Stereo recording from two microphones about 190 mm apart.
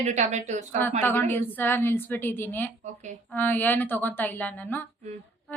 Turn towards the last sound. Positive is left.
turn(degrees=10)  # may be behind; listen again after turning